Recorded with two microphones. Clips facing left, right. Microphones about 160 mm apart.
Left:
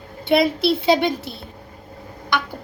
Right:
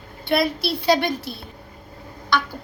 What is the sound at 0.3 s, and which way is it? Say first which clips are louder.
Child singing: left 4 dB; 20° left (ahead or behind).